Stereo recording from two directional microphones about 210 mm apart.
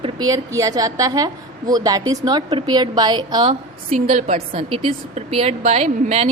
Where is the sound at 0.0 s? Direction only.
20° right (ahead or behind).